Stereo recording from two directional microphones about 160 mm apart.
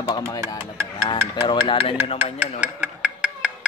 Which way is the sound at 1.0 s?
30° left (ahead or behind).